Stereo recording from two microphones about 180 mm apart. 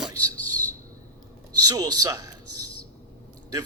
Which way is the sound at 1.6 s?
20° right (ahead or behind).